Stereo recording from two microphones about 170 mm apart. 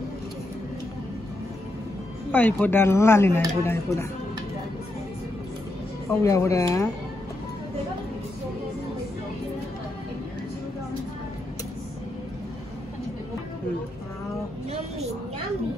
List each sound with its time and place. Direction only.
2.3 s speech: 10° left (ahead or behind)
6.0 s speech: 20° left (ahead or behind)